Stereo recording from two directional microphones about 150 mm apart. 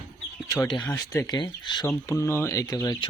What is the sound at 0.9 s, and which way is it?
Speech, 20° left (ahead or behind).